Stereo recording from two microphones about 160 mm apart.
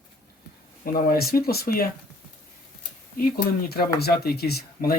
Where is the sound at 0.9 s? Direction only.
70° left (ahead or behind).